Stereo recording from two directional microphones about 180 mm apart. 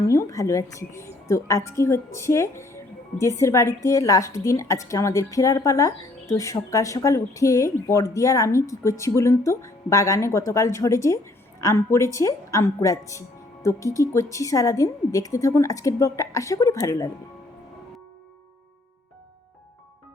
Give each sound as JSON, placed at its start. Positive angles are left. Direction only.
{"t": 0.1, "sound": "a woman's voice", "side_deg": 15}